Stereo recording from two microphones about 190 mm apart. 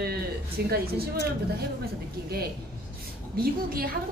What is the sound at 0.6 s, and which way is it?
Speech, 55° right (ahead or behind).